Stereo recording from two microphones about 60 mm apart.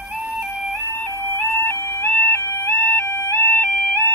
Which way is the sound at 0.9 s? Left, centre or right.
Right.